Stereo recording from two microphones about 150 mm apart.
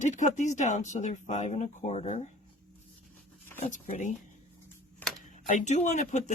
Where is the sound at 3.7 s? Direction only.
55° left (ahead or behind).